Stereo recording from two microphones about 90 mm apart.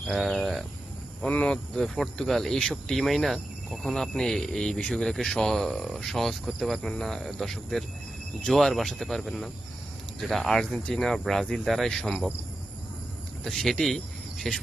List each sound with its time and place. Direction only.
0.1 s speech: centre (ahead or behind)
1.2 s speech: 10° left (ahead or behind)
13.4 s speech: 5° left (ahead or behind)